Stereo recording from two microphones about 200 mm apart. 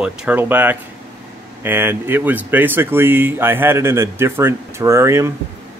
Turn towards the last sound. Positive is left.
turn(degrees=-15)  # may be behind; listen again after turning